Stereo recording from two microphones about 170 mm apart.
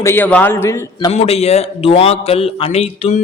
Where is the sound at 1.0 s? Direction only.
35° left (ahead or behind).